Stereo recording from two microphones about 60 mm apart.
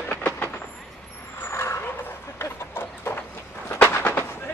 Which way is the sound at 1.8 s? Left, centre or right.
Left.